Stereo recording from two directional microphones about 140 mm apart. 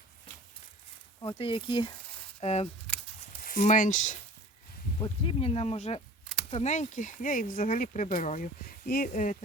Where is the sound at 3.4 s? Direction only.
70° left (ahead or behind).